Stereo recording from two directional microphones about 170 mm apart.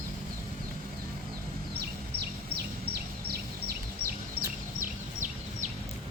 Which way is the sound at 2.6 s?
70° right (ahead or behind).